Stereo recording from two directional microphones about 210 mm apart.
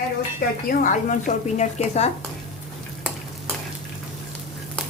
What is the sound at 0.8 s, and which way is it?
A woman's voice, 35° left (ahead or behind).